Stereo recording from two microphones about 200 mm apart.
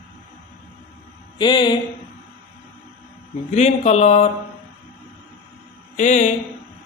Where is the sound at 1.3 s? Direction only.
20° left (ahead or behind).